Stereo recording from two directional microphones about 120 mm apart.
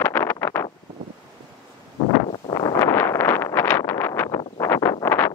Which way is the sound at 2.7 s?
20° left (ahead or behind).